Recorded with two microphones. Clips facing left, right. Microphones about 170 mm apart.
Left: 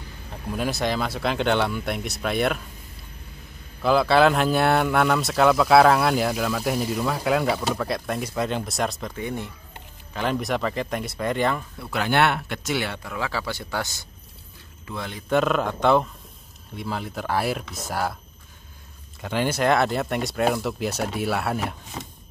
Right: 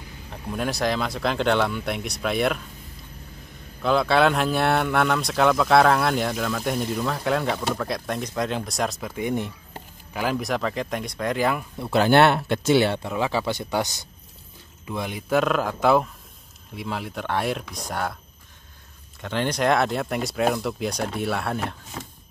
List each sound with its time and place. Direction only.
0.3 s speech: centre (ahead or behind)
3.8 s speech: centre (ahead or behind)
9.1 s speech: 15° right (ahead or behind)
10.1 s speech: centre (ahead or behind)
11.8 s speech: 30° right (ahead or behind); by 15.3 s 15° right (ahead or behind)
15.3 s speech: centre (ahead or behind)
19.2 s speech: 5° left (ahead or behind)